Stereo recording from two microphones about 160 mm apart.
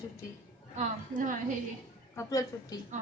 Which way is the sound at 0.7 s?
50° right (ahead or behind).